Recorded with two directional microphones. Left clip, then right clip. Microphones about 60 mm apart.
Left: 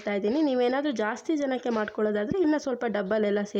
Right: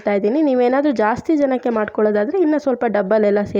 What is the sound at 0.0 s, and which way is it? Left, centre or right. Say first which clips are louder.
Speech: right 10 dB; right.